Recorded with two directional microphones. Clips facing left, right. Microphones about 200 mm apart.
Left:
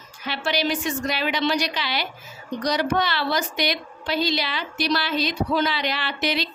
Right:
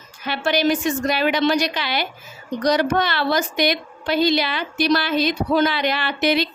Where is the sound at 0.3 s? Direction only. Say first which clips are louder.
Right 5 dB; 50° right (ahead or behind).